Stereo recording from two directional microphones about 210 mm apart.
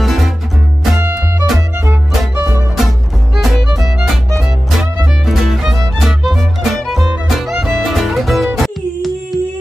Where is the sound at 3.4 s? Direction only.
Centre (ahead or behind).